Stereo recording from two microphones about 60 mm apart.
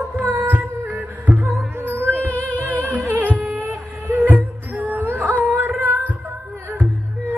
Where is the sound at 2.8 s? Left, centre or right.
Right.